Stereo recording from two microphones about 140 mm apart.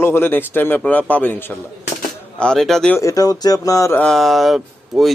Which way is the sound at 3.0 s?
25° left (ahead or behind).